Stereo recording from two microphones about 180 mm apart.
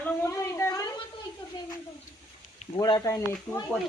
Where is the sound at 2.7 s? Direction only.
20° left (ahead or behind).